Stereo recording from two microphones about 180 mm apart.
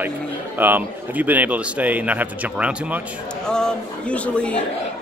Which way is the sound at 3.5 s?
5° left (ahead or behind).